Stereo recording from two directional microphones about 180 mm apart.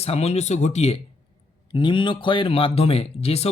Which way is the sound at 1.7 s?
25° left (ahead or behind).